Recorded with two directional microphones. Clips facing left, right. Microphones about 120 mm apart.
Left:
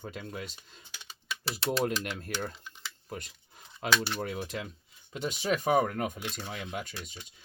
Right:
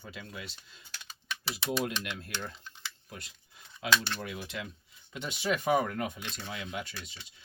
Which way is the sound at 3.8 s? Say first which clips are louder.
Left 1 dB; 50° left (ahead or behind).